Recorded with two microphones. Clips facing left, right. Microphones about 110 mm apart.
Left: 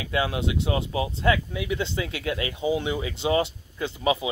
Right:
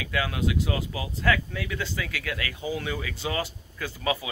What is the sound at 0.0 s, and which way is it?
Speech, 25° left (ahead or behind).